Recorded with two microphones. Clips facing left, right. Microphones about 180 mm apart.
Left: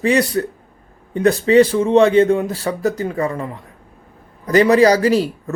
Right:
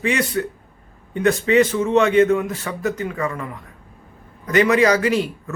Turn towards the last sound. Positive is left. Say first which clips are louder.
# left 4 dB
turn(degrees=35)  # may be behind; listen again after turning